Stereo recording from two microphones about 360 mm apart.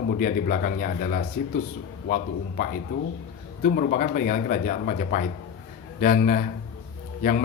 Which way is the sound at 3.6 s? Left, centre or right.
Left.